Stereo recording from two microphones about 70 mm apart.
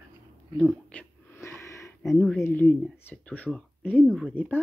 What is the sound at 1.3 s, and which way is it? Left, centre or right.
Wheeze, left.